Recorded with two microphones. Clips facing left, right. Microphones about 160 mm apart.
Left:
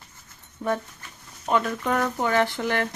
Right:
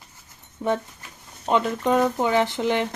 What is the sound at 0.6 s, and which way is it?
Speech, 10° right (ahead or behind).